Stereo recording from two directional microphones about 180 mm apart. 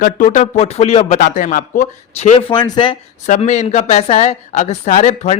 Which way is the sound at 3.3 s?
40° left (ahead or behind).